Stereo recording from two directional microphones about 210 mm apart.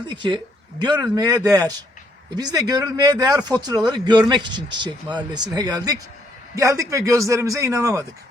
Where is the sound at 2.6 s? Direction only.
20° right (ahead or behind).